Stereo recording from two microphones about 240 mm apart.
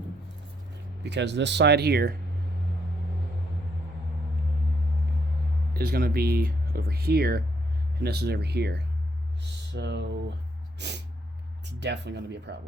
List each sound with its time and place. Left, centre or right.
1.0 s speech: right
5.7 s speech: right
10.8 s snort: right
11.6 s speech: right